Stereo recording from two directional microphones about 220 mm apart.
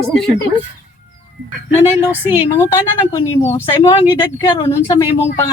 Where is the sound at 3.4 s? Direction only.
10° left (ahead or behind).